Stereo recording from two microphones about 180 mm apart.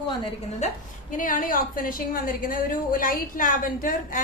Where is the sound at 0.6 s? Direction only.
40° left (ahead or behind).